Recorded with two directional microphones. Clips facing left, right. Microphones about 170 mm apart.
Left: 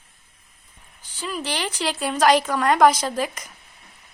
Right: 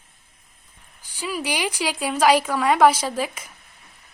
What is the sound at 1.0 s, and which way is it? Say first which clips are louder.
Speech: right 2 dB; 10° right (ahead or behind).